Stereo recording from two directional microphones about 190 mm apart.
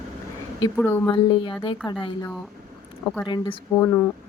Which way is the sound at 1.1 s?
25° left (ahead or behind).